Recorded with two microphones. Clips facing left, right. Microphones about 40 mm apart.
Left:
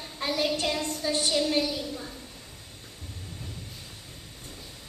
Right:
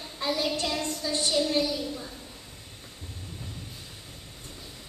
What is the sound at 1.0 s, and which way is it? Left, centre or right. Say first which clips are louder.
Speech: left 3 dB; left.